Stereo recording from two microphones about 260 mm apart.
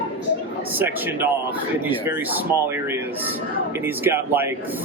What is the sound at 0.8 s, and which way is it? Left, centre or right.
Speech, centre.